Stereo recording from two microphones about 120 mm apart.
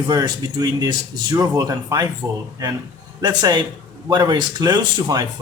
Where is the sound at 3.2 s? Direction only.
35° right (ahead or behind).